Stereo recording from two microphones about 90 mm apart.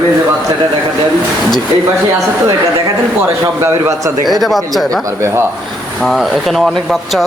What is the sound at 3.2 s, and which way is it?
Speech, 25° right (ahead or behind).